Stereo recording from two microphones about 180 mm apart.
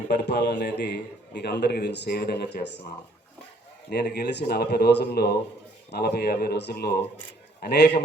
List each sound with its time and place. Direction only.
0.1 s a man's voice: 70° left (ahead or behind)
3.8 s a man's voice: 65° left (ahead or behind)